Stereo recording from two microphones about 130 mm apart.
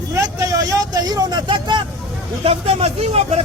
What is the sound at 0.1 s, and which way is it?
Vehicle, 25° right (ahead or behind).